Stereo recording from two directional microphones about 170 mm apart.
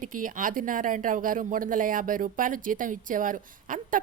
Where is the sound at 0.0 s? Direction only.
50° right (ahead or behind).